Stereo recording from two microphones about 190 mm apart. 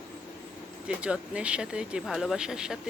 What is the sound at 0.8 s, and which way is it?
Speech, 5° right (ahead or behind).